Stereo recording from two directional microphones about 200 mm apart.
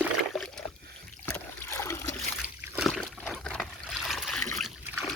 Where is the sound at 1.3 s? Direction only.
15° left (ahead or behind).